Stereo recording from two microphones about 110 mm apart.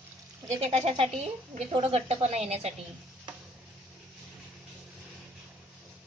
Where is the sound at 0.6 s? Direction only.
70° right (ahead or behind).